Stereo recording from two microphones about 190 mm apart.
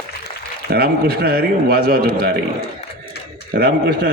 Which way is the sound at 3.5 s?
55° right (ahead or behind).